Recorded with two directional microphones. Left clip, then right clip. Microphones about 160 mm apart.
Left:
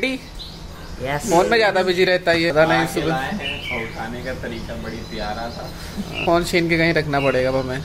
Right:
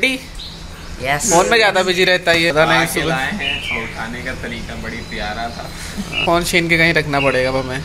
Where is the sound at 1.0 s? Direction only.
15° left (ahead or behind).